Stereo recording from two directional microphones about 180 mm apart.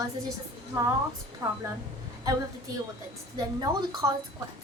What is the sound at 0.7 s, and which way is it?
Speech, 15° right (ahead or behind).